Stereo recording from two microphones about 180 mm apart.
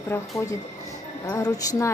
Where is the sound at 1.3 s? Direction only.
20° left (ahead or behind).